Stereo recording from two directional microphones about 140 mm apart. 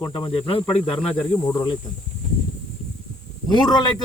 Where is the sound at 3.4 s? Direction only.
30° left (ahead or behind).